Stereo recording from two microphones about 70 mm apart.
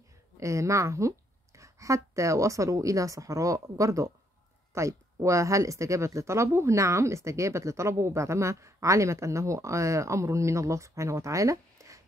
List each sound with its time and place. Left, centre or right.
0.4 s a woman's voice: right